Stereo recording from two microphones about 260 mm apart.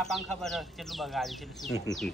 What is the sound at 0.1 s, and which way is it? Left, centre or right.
Speech, centre.